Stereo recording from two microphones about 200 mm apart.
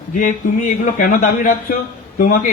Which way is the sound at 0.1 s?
40° left (ahead or behind).